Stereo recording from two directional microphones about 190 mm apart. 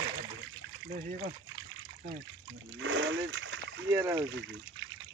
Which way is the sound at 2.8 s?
90° right.